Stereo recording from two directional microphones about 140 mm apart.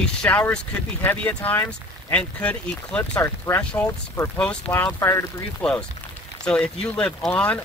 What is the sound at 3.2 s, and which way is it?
Speech, 20° left (ahead or behind).